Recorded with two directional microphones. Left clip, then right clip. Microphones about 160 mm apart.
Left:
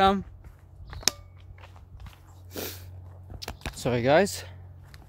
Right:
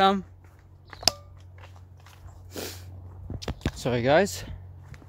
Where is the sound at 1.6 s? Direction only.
5° left (ahead or behind).